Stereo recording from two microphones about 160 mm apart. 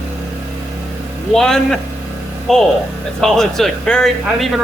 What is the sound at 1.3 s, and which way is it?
Speech, 5° left (ahead or behind).